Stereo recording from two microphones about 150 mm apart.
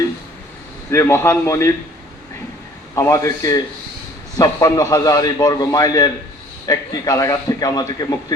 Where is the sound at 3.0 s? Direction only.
20° left (ahead or behind).